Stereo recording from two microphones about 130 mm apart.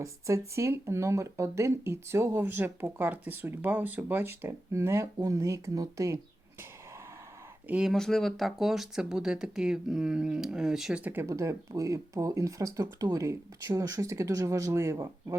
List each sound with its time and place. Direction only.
0.0 s speech: 25° right (ahead or behind)
7.7 s speech: 5° right (ahead or behind); by 15.4 s 25° right (ahead or behind)